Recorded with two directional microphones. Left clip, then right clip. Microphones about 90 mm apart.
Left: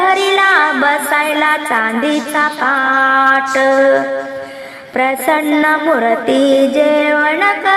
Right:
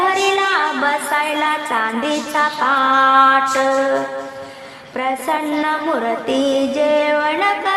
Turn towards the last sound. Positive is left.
turn(degrees=35)  # may be behind; listen again after turning